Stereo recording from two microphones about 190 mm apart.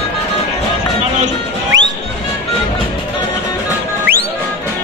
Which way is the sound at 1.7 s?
20° right (ahead or behind).